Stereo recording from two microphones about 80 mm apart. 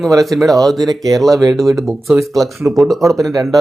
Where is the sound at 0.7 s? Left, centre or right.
Right.